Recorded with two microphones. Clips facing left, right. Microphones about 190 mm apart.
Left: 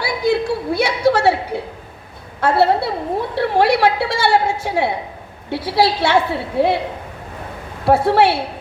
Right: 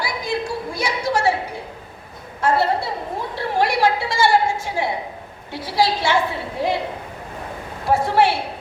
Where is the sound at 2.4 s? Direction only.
65° left (ahead or behind).